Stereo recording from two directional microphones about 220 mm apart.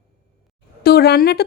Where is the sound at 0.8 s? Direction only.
45° left (ahead or behind).